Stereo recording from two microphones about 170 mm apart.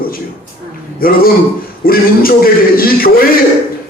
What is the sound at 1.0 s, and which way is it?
Speech, 60° left (ahead or behind).